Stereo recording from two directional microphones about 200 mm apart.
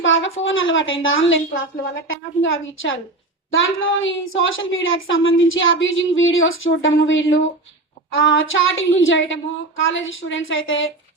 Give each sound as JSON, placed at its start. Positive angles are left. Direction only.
{"t": 0.0, "sound": "a woman's voice", "side_deg": 75}